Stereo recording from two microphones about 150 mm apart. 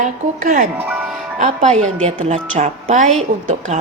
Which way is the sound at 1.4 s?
55° right (ahead or behind).